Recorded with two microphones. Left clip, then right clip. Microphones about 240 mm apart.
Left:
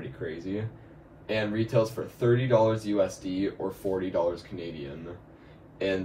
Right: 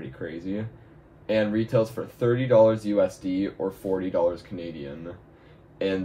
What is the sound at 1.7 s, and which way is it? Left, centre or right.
Speech, right.